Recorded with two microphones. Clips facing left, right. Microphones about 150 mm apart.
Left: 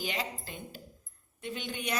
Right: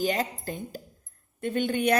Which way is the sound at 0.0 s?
45° right (ahead or behind).